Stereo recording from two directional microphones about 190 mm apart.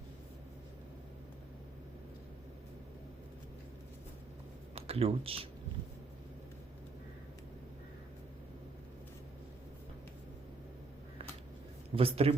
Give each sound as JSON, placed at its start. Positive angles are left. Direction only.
{"t": 4.7, "sound": "speech", "side_deg": -30}
{"t": 11.9, "sound": "speech", "side_deg": -30}